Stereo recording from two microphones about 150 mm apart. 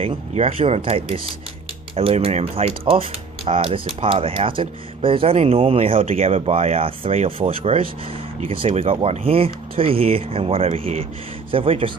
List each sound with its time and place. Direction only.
0.0 s speech: 40° right (ahead or behind)